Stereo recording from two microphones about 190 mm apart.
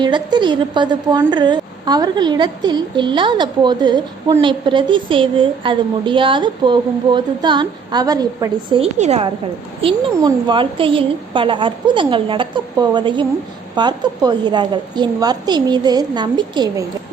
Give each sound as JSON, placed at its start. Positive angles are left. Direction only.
{"t": 0.0, "sound": "a woman's voice", "side_deg": -25}